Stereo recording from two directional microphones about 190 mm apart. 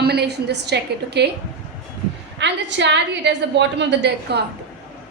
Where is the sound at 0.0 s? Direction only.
60° right (ahead or behind).